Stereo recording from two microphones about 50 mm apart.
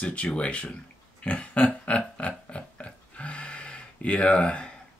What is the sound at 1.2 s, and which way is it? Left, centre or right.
Burping, left.